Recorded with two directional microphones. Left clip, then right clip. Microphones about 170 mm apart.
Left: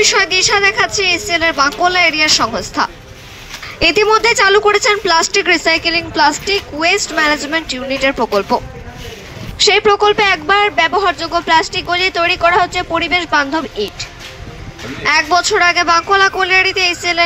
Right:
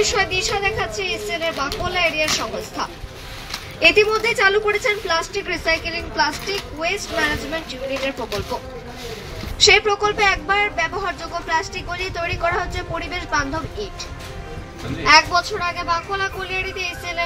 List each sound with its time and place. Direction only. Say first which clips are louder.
0.0 s speech: left 8 dB; 60° left (ahead or behind)
9.6 s speech: left 4 dB; 55° left (ahead or behind)
15.0 s speech: left 2 dB; 70° left (ahead or behind)